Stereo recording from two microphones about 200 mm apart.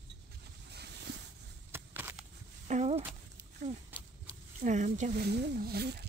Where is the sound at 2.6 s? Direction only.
35° right (ahead or behind).